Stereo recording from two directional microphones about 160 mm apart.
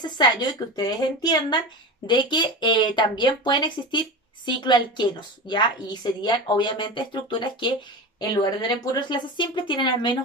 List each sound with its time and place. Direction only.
0.0 s a woman's voice: 25° left (ahead or behind)